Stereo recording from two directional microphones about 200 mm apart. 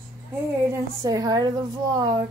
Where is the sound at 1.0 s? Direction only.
15° right (ahead or behind).